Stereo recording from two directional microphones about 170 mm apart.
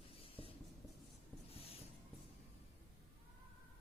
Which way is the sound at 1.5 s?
35° left (ahead or behind).